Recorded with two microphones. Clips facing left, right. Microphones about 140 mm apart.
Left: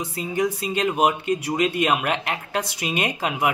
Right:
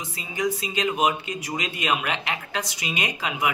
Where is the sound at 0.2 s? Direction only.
55° left (ahead or behind).